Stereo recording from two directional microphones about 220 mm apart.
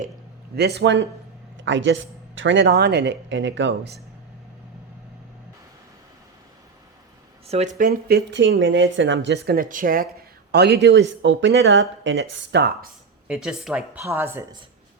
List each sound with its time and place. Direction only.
0.5 s speech: 50° right (ahead or behind)
7.4 s a man's voice: 30° right (ahead or behind); by 12.9 s 50° right (ahead or behind)
13.2 s speech: 5° right (ahead or behind)